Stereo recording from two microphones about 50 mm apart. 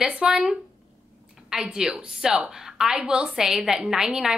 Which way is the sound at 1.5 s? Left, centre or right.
Centre.